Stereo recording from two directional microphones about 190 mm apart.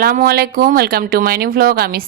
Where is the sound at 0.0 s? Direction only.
50° right (ahead or behind).